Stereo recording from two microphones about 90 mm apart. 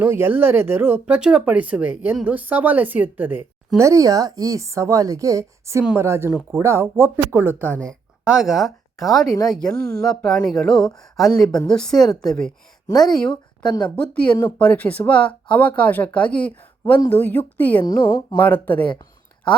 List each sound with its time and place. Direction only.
0.0 s speech: 25° right (ahead or behind)
3.8 s a woman's voice: 35° right (ahead or behind)
8.2 s speech: 10° right (ahead or behind); by 12.5 s 10° left (ahead or behind)
12.9 s a woman's voice: 50° left (ahead or behind)
13.9 s a woman's voice: 15° left (ahead or behind)
17.8 s a woman's voice: 50° left (ahead or behind)
18.4 s a woman's voice: 20° left (ahead or behind)